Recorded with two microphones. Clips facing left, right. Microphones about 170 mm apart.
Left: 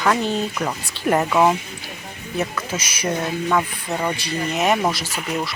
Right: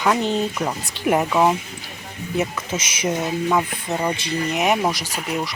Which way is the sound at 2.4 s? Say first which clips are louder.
Right 1 dB; 20° right (ahead or behind).